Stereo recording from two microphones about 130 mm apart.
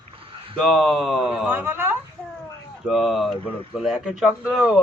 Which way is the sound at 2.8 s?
Centre (ahead or behind).